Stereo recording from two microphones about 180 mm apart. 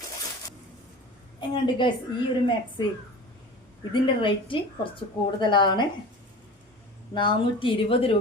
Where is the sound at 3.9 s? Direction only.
30° left (ahead or behind).